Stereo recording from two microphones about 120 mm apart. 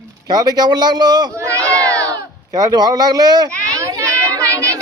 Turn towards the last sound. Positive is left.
turn(degrees=-25)  # may be behind; listen again after turning